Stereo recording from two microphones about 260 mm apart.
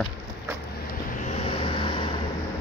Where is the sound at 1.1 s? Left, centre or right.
Left.